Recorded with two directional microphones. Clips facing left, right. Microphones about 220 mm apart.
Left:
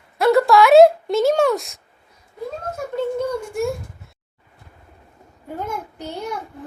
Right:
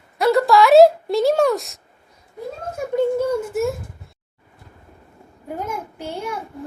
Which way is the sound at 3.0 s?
5° right (ahead or behind).